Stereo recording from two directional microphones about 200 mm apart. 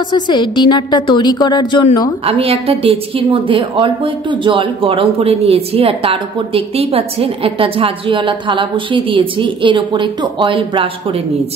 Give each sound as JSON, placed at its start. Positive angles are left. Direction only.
{"t": 0.1, "sound": "a woman's voice", "side_deg": 20}
{"t": 2.2, "sound": "a woman's voice", "side_deg": -30}